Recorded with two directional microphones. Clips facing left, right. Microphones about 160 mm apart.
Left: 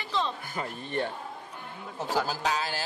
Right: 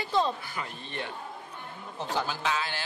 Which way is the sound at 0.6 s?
45° left (ahead or behind).